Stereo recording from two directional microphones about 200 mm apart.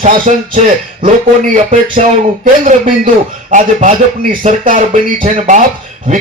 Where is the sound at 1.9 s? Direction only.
40° right (ahead or behind).